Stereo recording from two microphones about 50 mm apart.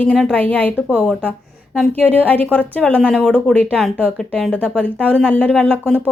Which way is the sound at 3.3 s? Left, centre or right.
Left.